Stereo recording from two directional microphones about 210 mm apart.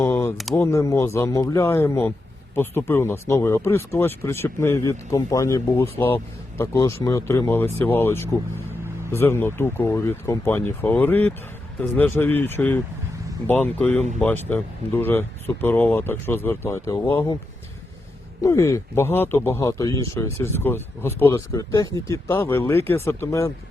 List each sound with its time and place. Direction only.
0.0 s a sound: 10° left (ahead or behind)
0.5 s speech: 15° left (ahead or behind)
18.4 s speech: 15° left (ahead or behind)